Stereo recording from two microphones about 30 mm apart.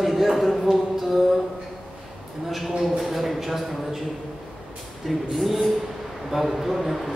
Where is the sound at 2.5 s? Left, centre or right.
Centre.